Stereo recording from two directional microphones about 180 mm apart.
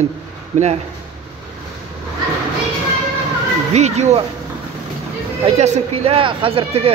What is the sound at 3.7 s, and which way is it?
Speech, 40° right (ahead or behind).